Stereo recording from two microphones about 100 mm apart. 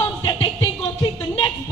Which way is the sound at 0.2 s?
55° left (ahead or behind).